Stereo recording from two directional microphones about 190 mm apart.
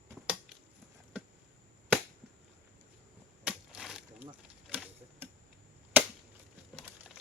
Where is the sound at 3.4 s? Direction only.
Centre (ahead or behind).